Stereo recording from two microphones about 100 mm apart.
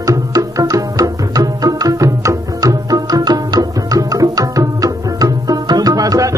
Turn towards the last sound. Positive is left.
turn(degrees=-35)  # may be behind; listen again after turning